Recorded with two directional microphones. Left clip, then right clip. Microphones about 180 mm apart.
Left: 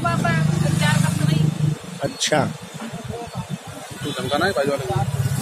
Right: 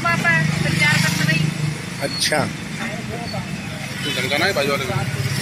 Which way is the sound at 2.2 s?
15° left (ahead or behind).